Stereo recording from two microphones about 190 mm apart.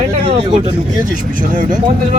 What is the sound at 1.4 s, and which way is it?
Speech, 45° right (ahead or behind).